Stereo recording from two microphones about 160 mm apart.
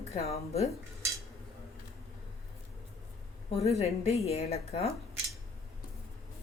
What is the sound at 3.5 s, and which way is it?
A woman's voice, 40° left (ahead or behind).